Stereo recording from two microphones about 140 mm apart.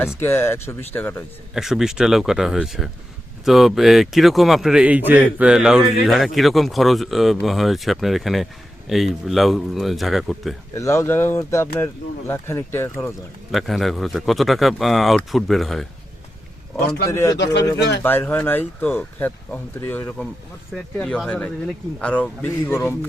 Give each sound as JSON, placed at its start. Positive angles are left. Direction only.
{"t": 0.2, "sound": "speech", "side_deg": 15}
{"t": 1.5, "sound": "speech", "side_deg": -5}
{"t": 10.8, "sound": "speech", "side_deg": 20}
{"t": 13.5, "sound": "speech", "side_deg": 0}
{"t": 17.1, "sound": "speech", "side_deg": 20}